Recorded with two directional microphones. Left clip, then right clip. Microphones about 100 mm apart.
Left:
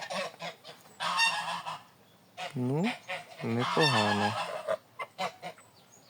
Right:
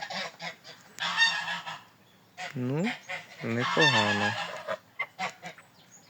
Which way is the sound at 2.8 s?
35° left (ahead or behind).